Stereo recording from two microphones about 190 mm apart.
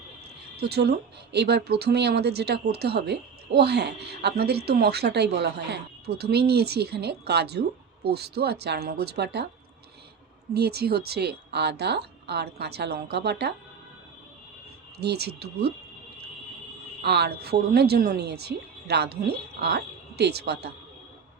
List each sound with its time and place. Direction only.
0.5 s speech: 60° right (ahead or behind)
10.5 s speech: 55° right (ahead or behind)
14.9 s speech: 60° right (ahead or behind)
17.0 s speech: 60° right (ahead or behind)